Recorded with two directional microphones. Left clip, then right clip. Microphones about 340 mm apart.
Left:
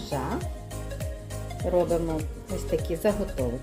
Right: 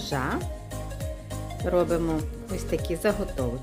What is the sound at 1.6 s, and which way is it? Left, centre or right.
Speech, centre.